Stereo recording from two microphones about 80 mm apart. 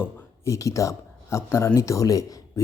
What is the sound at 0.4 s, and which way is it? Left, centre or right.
A man's voice, left.